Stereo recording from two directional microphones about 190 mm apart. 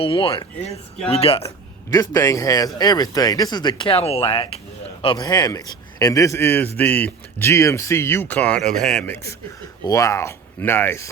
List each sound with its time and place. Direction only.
0.0 s speech: 30° left (ahead or behind)
1.5 s a man's voice: 20° left (ahead or behind)